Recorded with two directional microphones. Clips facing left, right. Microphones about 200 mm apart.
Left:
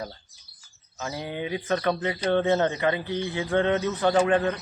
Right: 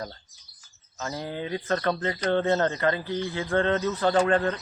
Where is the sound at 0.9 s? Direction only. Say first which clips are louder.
Even; 15° left (ahead or behind).